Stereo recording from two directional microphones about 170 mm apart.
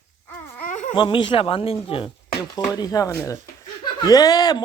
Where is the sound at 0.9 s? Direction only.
30° left (ahead or behind).